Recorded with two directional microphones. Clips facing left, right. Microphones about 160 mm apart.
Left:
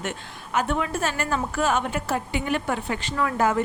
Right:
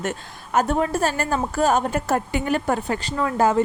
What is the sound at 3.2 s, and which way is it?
Speech, 30° right (ahead or behind).